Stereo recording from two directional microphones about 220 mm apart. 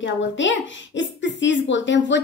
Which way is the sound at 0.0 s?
60° left (ahead or behind).